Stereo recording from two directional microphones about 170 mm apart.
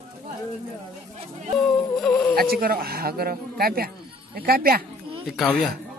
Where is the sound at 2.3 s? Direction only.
60° right (ahead or behind).